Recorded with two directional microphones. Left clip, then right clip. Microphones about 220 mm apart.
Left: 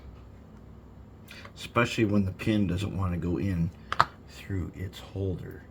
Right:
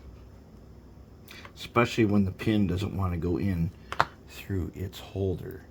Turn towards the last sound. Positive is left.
turn(degrees=-35)  # may be behind; listen again after turning